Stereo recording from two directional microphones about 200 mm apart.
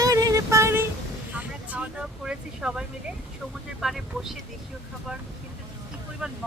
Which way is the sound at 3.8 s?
Centre (ahead or behind).